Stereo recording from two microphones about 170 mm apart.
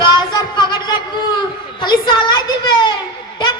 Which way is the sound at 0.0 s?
25° left (ahead or behind).